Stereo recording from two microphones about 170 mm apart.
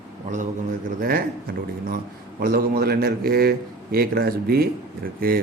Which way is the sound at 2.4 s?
60° right (ahead or behind).